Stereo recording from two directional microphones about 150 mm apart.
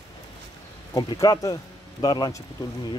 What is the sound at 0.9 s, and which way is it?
Speech, 25° left (ahead or behind).